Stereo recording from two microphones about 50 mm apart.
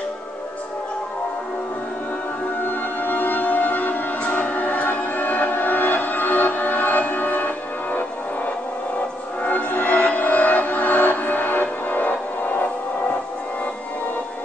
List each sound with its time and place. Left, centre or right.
2.6 s music: left